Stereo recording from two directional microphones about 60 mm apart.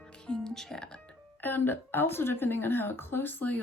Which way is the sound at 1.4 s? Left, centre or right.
Left.